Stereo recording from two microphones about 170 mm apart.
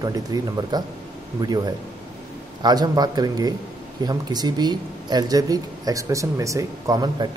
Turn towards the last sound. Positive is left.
turn(degrees=-25)  # may be behind; listen again after turning